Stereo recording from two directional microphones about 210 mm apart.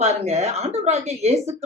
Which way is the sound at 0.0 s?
30° right (ahead or behind).